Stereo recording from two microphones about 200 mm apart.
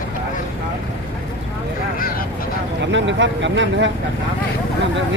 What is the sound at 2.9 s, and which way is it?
Speech, 65° right (ahead or behind).